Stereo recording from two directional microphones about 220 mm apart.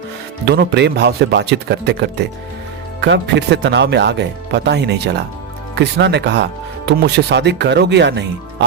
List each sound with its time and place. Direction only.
0.4 s speech: 50° right (ahead or behind)